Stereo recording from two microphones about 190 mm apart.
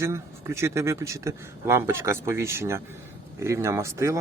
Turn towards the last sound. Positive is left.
turn(degrees=-15)  # may be behind; listen again after turning